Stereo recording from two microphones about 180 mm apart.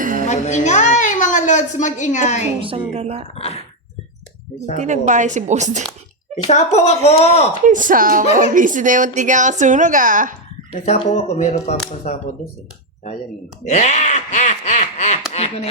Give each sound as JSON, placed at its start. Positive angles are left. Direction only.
{"t": 0.0, "sound": "child singing", "side_deg": -50}
{"t": 0.3, "sound": "a woman's voice", "side_deg": 40}
{"t": 2.6, "sound": "a woman's voice", "side_deg": -30}
{"t": 3.3, "sound": "speech", "side_deg": 35}
{"t": 4.8, "sound": "a woman's voice", "side_deg": -45}
{"t": 6.5, "sound": "speech", "side_deg": 40}
{"t": 7.6, "sound": "a woman's voice", "side_deg": -45}
{"t": 10.7, "sound": "speech", "side_deg": 35}
{"t": 13.7, "sound": "speech", "side_deg": 40}